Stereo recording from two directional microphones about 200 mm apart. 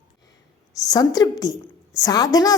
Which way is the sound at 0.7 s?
20° left (ahead or behind).